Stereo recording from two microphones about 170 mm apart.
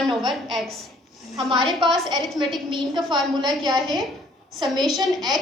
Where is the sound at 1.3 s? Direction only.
25° right (ahead or behind).